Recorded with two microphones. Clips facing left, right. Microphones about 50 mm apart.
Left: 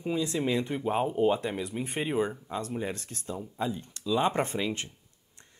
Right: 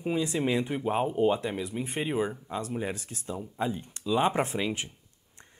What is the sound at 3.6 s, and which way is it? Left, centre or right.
Speech, right.